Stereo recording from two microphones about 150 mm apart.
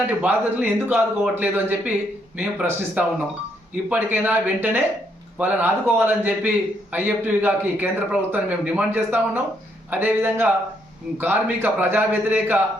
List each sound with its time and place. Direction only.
0.0 s a man's voice: 10° right (ahead or behind)